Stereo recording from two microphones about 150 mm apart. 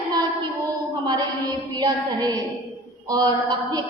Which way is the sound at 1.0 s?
25° right (ahead or behind).